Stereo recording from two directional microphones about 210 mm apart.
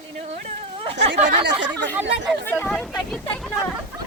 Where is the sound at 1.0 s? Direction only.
55° right (ahead or behind).